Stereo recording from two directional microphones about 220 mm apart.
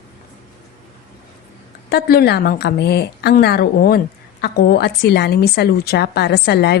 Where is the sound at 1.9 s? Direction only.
45° left (ahead or behind).